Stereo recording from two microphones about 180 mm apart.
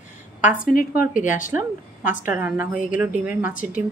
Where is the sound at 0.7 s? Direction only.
55° left (ahead or behind).